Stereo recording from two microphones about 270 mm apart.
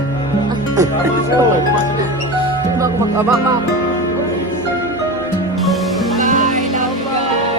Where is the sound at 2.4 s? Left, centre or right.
Centre.